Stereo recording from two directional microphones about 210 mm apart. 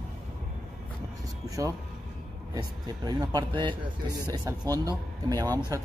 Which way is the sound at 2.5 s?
20° right (ahead or behind).